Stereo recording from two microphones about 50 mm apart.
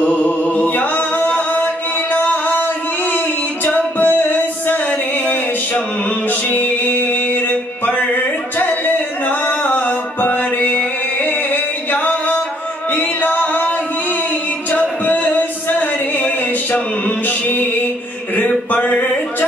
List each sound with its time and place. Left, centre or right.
0.0 s music: left
6.5 s music: left
17.3 s music: left
18.7 s a sound: left